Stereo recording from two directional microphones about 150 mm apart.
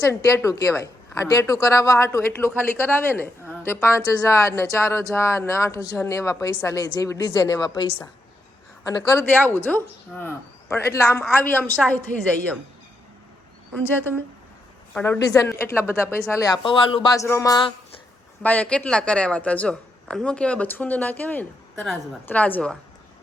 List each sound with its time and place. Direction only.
0.0 s a woman's voice: 20° left (ahead or behind)
8.9 s a woman's voice: 25° left (ahead or behind)
11.8 s a woman's voice: centre (ahead or behind)
13.7 s a woman's voice: 15° left (ahead or behind)
18.4 s speech: 10° left (ahead or behind)